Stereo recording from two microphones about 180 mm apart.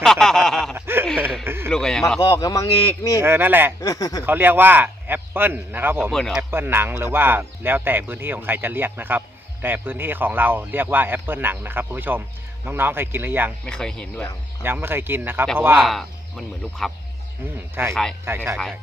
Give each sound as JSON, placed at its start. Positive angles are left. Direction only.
{"t": 0.0, "sound": "a sound", "side_deg": 0}
{"t": 1.5, "sound": "speech", "side_deg": -10}
{"t": 1.7, "sound": "speech", "side_deg": 5}
{"t": 2.1, "sound": "speech", "side_deg": 20}
{"t": 3.2, "sound": "speech", "side_deg": -10}
{"t": 3.8, "sound": "speech", "side_deg": 20}
{"t": 4.2, "sound": "speech", "side_deg": -10}
{"t": 6.1, "sound": "speech", "side_deg": 0}
{"t": 6.5, "sound": "speech", "side_deg": -10}
{"t": 13.7, "sound": "speech", "side_deg": 5}
{"t": 14.6, "sound": "speech", "side_deg": -10}
{"t": 15.8, "sound": "speech", "side_deg": 0}
{"t": 17.8, "sound": "speech", "side_deg": -10}